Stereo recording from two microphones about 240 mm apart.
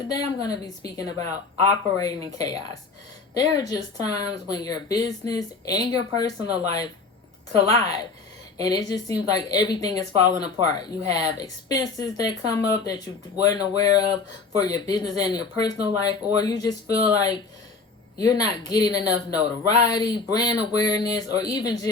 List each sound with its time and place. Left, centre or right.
0.1 s speech: centre